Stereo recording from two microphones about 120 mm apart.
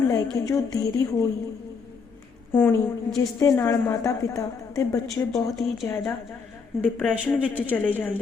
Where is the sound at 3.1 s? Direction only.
30° left (ahead or behind).